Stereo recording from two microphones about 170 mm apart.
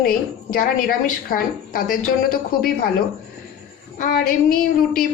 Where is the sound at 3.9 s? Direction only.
55° left (ahead or behind).